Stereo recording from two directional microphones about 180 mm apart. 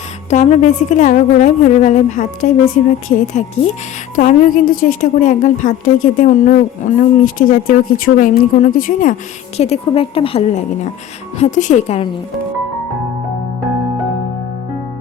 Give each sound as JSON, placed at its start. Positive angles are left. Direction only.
{"t": 0.3, "sound": "a woman's voice", "side_deg": 40}
{"t": 9.6, "sound": "a woman's voice", "side_deg": 35}